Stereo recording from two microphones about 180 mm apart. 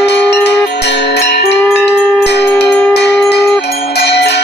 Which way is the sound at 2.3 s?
70° left (ahead or behind).